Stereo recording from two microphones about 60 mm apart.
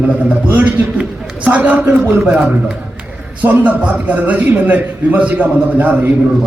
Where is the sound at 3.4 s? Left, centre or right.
Right.